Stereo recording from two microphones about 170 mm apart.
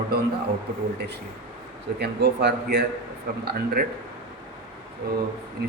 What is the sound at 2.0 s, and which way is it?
Speech, 75° right (ahead or behind).